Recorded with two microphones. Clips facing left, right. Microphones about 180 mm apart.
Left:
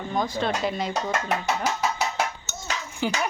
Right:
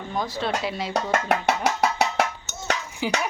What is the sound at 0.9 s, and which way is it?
Speech, 60° right (ahead or behind).